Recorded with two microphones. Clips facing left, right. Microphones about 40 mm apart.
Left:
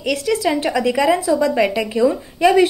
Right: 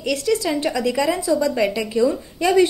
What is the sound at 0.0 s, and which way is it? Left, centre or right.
Speech, centre.